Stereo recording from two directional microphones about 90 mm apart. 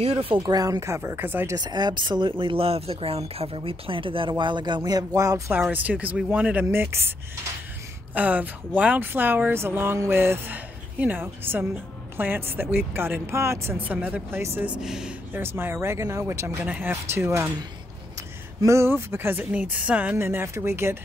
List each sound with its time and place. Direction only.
0.4 s speech: 40° right (ahead or behind); by 1.6 s 25° right (ahead or behind)
1.6 s speech: 55° right (ahead or behind)
5.5 s a woman's voice: 20° right (ahead or behind)
6.7 s a woman's voice: 25° right (ahead or behind)
13.7 s a woman's voice: 15° right (ahead or behind)
14.8 s a woman's voice: 5° right (ahead or behind)
15.3 s speech: 25° right (ahead or behind)
16.6 s a woman's voice: 15° right (ahead or behind)
16.9 s speech: 30° right (ahead or behind)